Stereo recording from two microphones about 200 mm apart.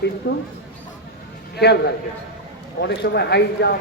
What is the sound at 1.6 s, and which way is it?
Speech, 55° left (ahead or behind).